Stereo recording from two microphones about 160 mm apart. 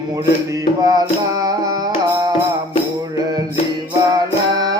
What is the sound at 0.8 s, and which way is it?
Music, 25° right (ahead or behind).